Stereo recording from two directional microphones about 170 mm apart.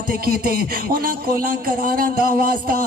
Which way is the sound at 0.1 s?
60° right (ahead or behind).